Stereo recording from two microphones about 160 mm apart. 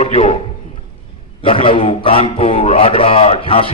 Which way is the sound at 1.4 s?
35° left (ahead or behind).